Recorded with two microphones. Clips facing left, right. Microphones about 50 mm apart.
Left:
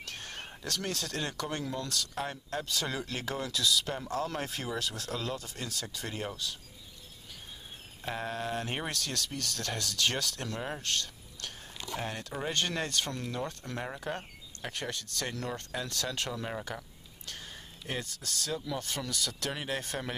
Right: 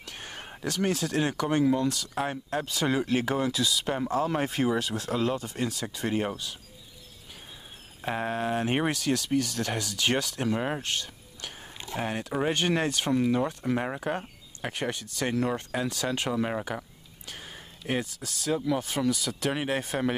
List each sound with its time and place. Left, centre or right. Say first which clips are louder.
0.0 s speech: right 2 dB; centre
8.0 s speech: right 6 dB; right
13.8 s speech: right 6 dB; right